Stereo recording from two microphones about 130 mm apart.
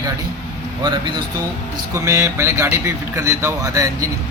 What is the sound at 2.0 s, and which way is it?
Speech, 20° right (ahead or behind).